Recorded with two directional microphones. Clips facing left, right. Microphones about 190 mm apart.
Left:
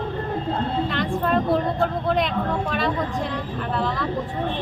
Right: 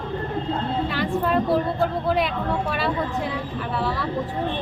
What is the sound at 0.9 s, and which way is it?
Speech, 5° right (ahead or behind).